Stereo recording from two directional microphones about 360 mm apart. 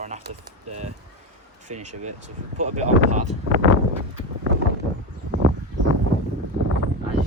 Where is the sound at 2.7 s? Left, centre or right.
Centre.